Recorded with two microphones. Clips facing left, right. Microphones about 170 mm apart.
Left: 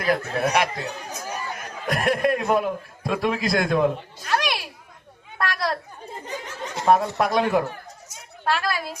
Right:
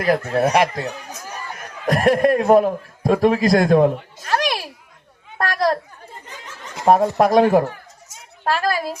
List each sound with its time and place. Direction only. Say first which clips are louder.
0.0 s a man's voice: right 5 dB; 35° right (ahead or behind)
1.9 s a man's voice: right 6 dB; 40° right (ahead or behind)
4.3 s children playing: right 4 dB; 40° right (ahead or behind)
5.4 s a sound: right 6 dB; 40° right (ahead or behind)
6.8 s a man's voice: right 5 dB; 35° right (ahead or behind)